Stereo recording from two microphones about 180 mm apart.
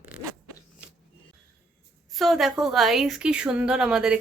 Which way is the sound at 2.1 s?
Centre (ahead or behind).